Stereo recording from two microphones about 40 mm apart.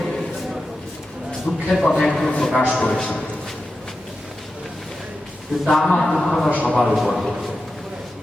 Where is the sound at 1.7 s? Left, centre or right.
Centre.